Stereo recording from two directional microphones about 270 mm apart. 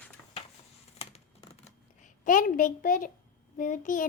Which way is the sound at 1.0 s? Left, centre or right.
Left.